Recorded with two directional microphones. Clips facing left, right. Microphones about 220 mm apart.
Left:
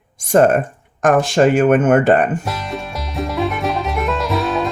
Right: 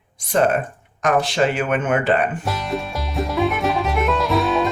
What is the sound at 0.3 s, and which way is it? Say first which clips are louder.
Speech: left 6 dB; 45° left (ahead or behind).